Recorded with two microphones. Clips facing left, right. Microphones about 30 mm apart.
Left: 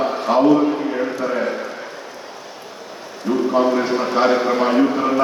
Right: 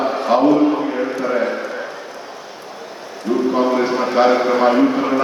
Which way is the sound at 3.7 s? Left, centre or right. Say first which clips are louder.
Right 1 dB; centre.